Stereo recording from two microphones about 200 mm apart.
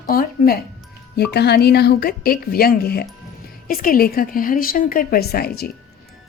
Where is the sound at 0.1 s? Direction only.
50° left (ahead or behind).